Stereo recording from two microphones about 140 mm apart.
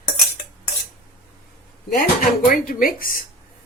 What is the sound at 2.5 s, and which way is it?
Speech, 90° left.